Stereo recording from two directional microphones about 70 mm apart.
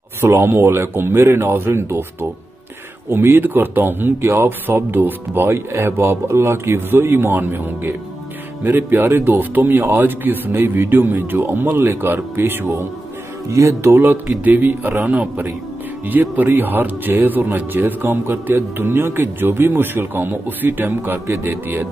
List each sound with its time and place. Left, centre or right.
0.2 s speech: right
3.1 s speech: right
13.5 s speech: right
13.9 s speech: right
20.8 s speech: right